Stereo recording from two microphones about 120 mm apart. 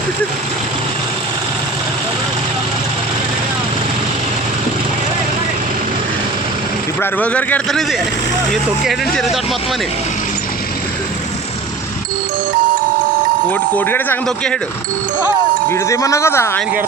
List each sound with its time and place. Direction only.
7.0 s speech: 10° left (ahead or behind)
13.5 s speech: 15° left (ahead or behind)
15.7 s speech: 25° left (ahead or behind)